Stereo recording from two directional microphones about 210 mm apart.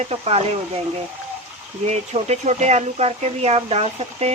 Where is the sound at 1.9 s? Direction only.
30° right (ahead or behind).